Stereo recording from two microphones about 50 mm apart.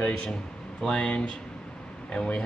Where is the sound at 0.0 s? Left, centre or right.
Left.